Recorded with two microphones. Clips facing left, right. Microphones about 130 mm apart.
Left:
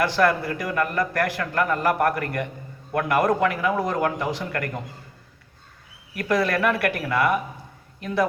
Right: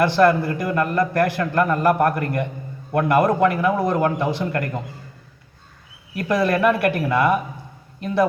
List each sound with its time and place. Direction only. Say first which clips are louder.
0.0 s a man's voice: right 5 dB; 25° right (ahead or behind)
3.5 s speech: right 4 dB; 40° right (ahead or behind)
3.8 s a man's voice: right 4 dB; 25° right (ahead or behind)
6.1 s a man's voice: right 3 dB; 25° right (ahead or behind)